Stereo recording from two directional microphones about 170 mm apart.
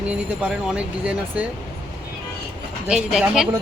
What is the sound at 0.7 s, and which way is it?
Speech, 5° right (ahead or behind).